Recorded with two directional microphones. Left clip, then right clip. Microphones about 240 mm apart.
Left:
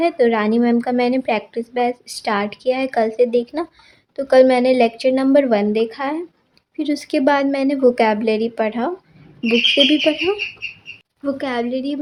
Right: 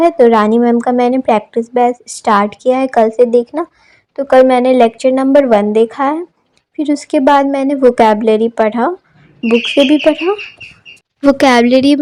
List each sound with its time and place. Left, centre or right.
0.0 s a woman's voice: centre
11.2 s a woman's voice: right